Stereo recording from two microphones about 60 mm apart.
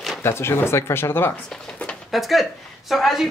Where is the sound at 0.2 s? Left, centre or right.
Left.